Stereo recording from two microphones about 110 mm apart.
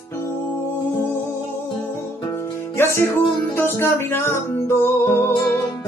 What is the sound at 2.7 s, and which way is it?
Music, 25° left (ahead or behind).